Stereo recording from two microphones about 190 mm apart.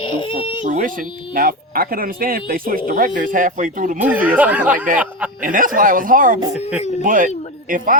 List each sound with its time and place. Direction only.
0.0 s speech: 25° left (ahead or behind)
0.6 s speech: 45° right (ahead or behind)
4.0 s speech: 5° right (ahead or behind)
5.4 s speech: 45° right (ahead or behind)